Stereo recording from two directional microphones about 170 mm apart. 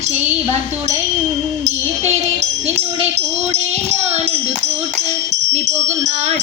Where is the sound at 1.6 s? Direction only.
40° right (ahead or behind).